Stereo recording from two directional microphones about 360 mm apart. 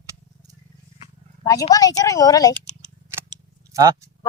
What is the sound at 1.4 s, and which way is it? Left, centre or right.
A woman's voice, centre.